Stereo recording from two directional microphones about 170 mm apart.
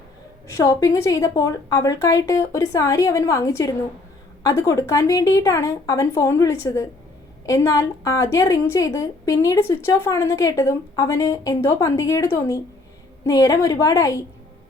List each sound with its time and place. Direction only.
0.4 s a woman's voice: 20° left (ahead or behind)